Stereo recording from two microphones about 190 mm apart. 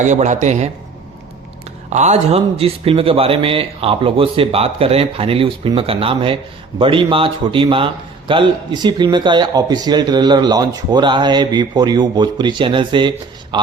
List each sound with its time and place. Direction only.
0.0 s a man's voice: 40° right (ahead or behind)
1.9 s speech: 35° right (ahead or behind)